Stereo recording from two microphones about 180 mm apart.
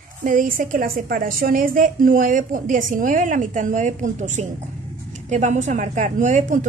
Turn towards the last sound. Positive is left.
turn(degrees=-45)  # may be behind; listen again after turning